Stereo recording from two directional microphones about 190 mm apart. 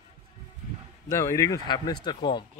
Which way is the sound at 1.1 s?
15° left (ahead or behind).